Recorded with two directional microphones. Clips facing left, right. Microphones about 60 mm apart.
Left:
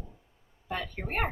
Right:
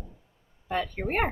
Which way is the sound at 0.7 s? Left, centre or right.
Right.